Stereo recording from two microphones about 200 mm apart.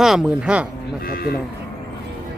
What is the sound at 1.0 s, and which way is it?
Speech, 50° left (ahead or behind).